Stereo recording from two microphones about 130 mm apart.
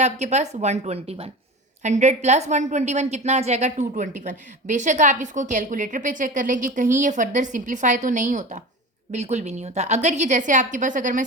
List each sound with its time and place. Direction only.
0.0 s a woman's voice: 60° right (ahead or behind)
1.8 s a woman's voice: 65° right (ahead or behind)
9.1 s a woman's voice: 60° right (ahead or behind); by 11.3 s 80° right